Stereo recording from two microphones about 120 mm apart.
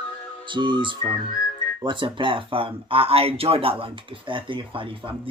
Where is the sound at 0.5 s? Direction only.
40° right (ahead or behind).